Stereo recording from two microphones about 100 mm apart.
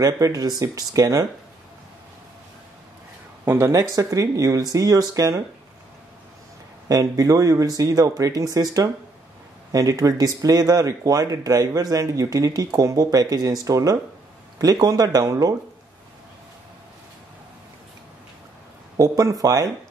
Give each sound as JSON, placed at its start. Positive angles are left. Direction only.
{"t": 0.0, "sound": "speech", "side_deg": -35}
{"t": 3.4, "sound": "speech", "side_deg": -25}
{"t": 6.9, "sound": "speech", "side_deg": -35}
{"t": 18.9, "sound": "speech", "side_deg": -35}